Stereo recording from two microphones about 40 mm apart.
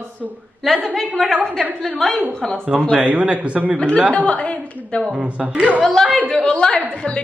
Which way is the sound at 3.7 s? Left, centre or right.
Left.